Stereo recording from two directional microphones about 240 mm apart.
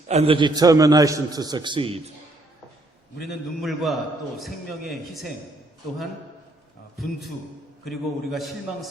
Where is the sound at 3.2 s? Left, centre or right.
Centre.